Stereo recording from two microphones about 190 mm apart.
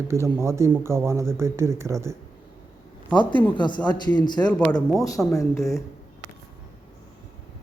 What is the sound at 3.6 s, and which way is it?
Speech, 25° left (ahead or behind).